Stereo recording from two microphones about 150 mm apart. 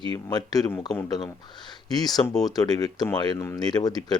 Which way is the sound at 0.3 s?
25° left (ahead or behind).